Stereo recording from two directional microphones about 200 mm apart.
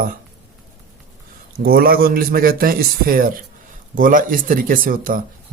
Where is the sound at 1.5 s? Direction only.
50° right (ahead or behind).